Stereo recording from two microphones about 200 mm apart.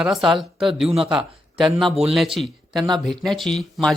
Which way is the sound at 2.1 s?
Centre (ahead or behind).